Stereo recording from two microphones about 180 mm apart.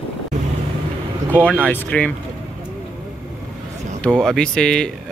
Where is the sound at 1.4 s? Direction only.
5° left (ahead or behind).